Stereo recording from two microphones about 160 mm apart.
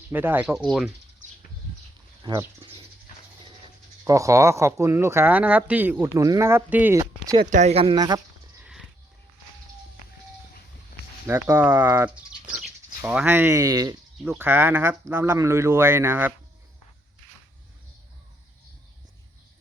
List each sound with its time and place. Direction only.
0.1 s speech: 15° right (ahead or behind)
2.2 s speech: 25° right (ahead or behind)
4.0 s speech: 20° right (ahead or behind)
6.1 s speech: 20° right (ahead or behind)
7.5 s speech: 45° right (ahead or behind)
7.9 s speech: 25° right (ahead or behind)
11.3 s speech: 15° right (ahead or behind)